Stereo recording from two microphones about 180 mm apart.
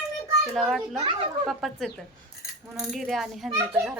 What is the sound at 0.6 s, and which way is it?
A child's voice, centre (ahead or behind).